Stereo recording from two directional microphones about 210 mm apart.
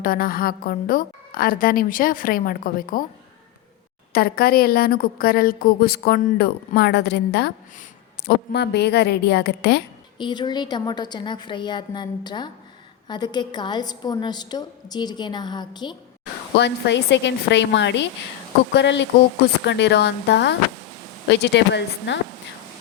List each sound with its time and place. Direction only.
0.0 s a woman's voice: 40° left (ahead or behind)
4.1 s a woman's voice: 45° left (ahead or behind)
10.2 s a woman's voice: 20° left (ahead or behind)
16.6 s a woman's voice: 55° left (ahead or behind)